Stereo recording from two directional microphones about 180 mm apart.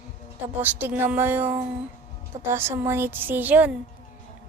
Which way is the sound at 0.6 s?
10° right (ahead or behind).